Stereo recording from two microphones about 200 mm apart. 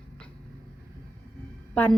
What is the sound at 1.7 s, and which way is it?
Speech, 5° left (ahead or behind).